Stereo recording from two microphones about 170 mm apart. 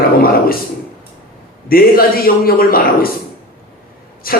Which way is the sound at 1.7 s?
60° left (ahead or behind).